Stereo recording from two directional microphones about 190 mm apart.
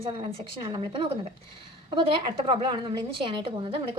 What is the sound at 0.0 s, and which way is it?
A woman's voice, 30° right (ahead or behind).